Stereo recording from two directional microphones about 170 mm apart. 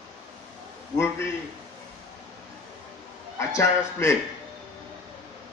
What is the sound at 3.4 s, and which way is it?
Speech, 15° left (ahead or behind).